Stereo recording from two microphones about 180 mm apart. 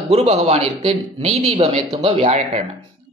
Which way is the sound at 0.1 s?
35° right (ahead or behind).